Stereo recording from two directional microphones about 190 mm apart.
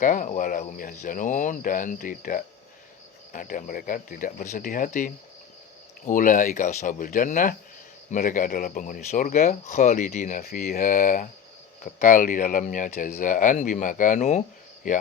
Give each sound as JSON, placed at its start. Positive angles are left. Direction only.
{"t": 0.0, "sound": "speech", "side_deg": 45}